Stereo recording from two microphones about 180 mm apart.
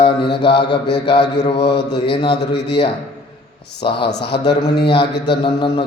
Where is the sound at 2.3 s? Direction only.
70° left (ahead or behind).